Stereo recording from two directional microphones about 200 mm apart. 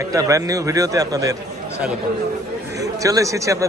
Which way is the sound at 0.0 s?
15° right (ahead or behind).